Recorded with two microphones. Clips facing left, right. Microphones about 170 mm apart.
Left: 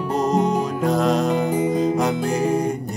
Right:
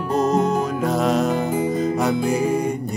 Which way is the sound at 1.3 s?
15° left (ahead or behind).